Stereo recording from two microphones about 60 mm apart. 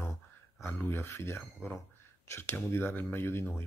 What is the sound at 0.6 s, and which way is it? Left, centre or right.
Speech, left.